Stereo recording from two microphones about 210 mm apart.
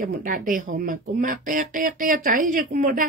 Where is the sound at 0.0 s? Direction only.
40° right (ahead or behind).